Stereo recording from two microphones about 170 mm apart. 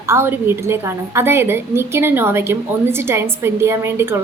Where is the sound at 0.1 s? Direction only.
15° right (ahead or behind).